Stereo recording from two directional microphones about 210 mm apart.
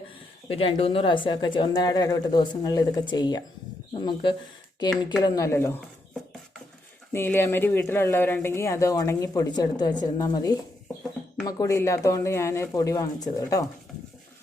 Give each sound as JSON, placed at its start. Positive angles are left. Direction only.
{"t": 0.5, "sound": "speech", "side_deg": 25}
{"t": 7.1, "sound": "speech", "side_deg": 10}